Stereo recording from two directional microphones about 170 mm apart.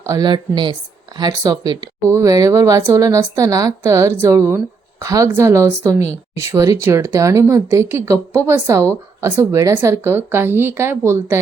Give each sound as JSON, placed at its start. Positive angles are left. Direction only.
{"t": 0.0, "sound": "speech", "side_deg": -20}